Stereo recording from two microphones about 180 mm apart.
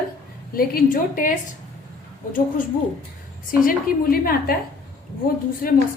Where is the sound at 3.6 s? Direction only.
55° left (ahead or behind).